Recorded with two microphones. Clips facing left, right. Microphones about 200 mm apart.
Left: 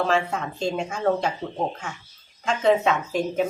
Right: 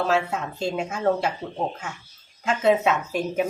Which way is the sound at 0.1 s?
5° right (ahead or behind).